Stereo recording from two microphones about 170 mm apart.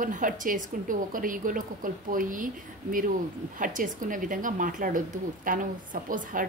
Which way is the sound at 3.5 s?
50° right (ahead or behind).